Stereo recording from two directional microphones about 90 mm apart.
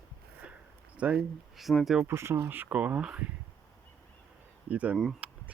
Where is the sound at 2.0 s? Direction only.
30° right (ahead or behind); by 3.3 s 10° right (ahead or behind).